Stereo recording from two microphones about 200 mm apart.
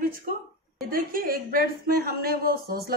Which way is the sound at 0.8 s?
45° right (ahead or behind).